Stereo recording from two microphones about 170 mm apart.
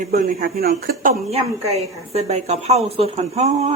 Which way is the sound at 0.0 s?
55° right (ahead or behind).